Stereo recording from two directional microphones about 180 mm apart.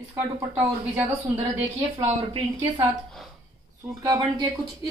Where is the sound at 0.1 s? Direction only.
10° right (ahead or behind).